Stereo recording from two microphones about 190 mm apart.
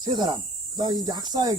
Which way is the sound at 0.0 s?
25° right (ahead or behind).